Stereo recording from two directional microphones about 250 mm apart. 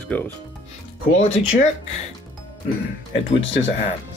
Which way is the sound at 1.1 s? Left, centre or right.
Left.